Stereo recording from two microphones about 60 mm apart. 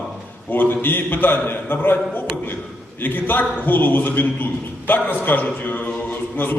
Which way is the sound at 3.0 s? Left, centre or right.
Left.